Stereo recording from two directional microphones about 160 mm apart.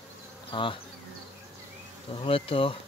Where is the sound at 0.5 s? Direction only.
30° left (ahead or behind).